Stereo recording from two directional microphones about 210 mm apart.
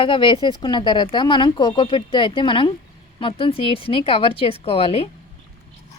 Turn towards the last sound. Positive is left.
turn(degrees=25)  # may be behind; listen again after turning